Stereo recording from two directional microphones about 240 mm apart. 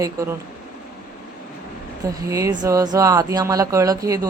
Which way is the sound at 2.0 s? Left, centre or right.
Centre.